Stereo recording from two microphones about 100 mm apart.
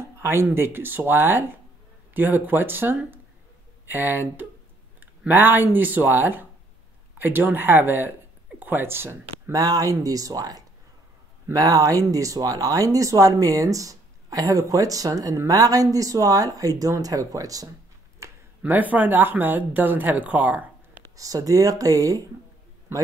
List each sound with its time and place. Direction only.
0.0 s speech: 25° right (ahead or behind)
18.2 s a sound: 30° right (ahead or behind)
18.6 s speech: 15° right (ahead or behind)
21.2 s speech: 35° right (ahead or behind)